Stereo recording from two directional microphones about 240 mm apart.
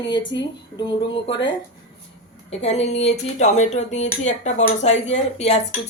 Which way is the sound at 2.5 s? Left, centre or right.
Left.